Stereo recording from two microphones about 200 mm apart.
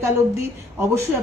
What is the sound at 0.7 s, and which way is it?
Speech, 10° right (ahead or behind).